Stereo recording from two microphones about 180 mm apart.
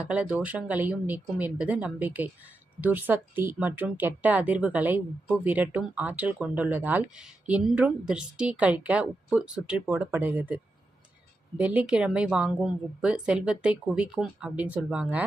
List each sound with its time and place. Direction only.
0.0 s a woman's voice: 5° right (ahead or behind)